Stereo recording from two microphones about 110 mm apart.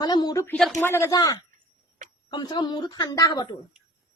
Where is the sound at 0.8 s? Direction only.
20° left (ahead or behind).